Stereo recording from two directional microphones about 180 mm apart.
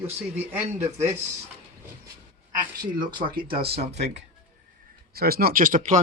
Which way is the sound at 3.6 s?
30° right (ahead or behind).